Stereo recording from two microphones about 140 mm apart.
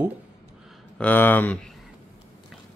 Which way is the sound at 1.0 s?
10° left (ahead or behind).